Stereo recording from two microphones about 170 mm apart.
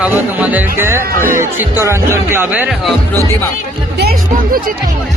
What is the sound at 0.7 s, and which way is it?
Speech, 15° right (ahead or behind).